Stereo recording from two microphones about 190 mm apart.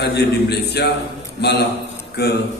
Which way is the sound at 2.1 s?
60° left (ahead or behind).